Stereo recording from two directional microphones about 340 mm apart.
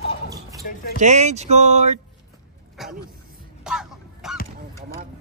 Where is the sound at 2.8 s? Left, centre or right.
Centre.